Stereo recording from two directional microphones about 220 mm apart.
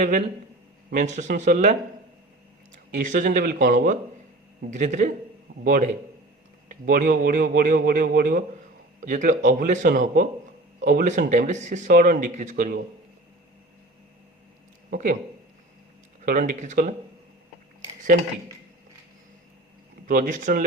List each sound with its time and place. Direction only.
0.0 s speech: 35° right (ahead or behind)
2.7 s speech: 35° right (ahead or behind)
14.8 s speech: 40° right (ahead or behind)
16.2 s speech: 40° right (ahead or behind)
20.1 s speech: 40° right (ahead or behind)